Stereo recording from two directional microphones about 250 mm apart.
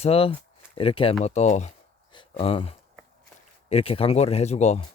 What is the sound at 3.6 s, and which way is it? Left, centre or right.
A man's voice, left.